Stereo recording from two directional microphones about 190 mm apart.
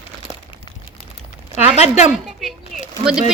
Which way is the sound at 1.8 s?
35° left (ahead or behind).